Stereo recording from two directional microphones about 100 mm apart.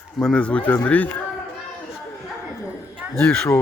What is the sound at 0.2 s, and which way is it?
Speech, 10° left (ahead or behind).